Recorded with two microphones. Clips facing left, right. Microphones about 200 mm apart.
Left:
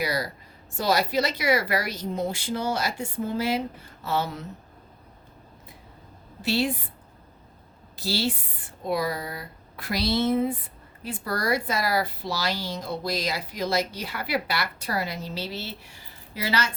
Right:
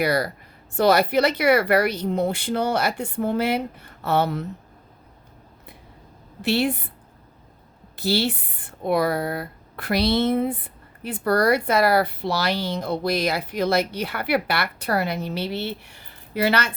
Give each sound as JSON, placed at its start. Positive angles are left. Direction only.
{"t": 0.0, "sound": "speech", "side_deg": -60}
{"t": 6.4, "sound": "a woman's voice", "side_deg": -60}
{"t": 7.9, "sound": "speech", "side_deg": -60}